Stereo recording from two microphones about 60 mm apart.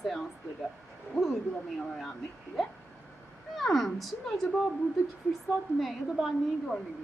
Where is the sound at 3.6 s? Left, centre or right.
Centre.